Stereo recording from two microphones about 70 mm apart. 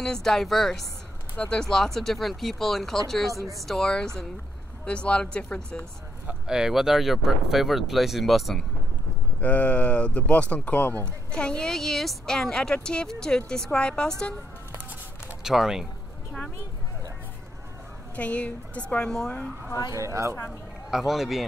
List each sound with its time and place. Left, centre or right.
0.0 s a woman's voice: centre
1.3 s speech: left
1.6 s a woman's voice: centre
6.4 s speech: centre
9.4 s speech: left
11.3 s a woman's voice: centre
15.4 s speech: centre
18.1 s a woman's voice: centre
19.9 s speech: right
20.9 s speech: centre